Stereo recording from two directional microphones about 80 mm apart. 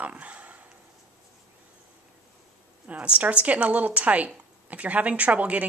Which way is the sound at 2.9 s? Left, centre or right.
Centre.